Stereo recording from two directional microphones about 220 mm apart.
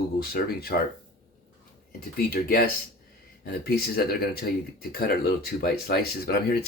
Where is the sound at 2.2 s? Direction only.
45° left (ahead or behind).